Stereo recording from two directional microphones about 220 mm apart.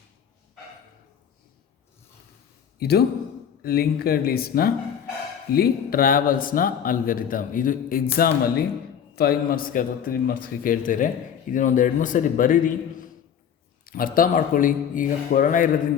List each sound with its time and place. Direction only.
2.7 s speech: 45° left (ahead or behind)
13.8 s speech: 40° left (ahead or behind)